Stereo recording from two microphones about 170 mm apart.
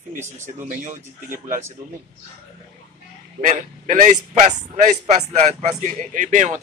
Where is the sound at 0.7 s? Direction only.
50° right (ahead or behind).